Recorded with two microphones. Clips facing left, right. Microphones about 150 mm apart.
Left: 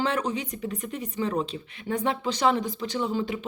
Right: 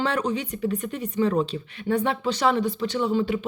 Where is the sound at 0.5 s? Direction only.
35° right (ahead or behind).